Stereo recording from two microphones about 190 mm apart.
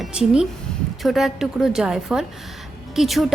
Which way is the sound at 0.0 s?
5° right (ahead or behind).